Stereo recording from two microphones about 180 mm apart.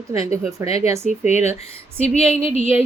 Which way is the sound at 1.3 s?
40° left (ahead or behind).